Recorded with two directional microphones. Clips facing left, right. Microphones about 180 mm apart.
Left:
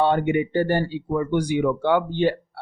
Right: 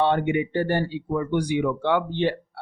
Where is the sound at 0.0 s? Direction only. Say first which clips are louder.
Left 2 dB; 40° left (ahead or behind).